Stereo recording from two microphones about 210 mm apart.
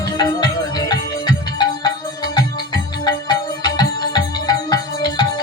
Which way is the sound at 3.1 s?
20° left (ahead or behind).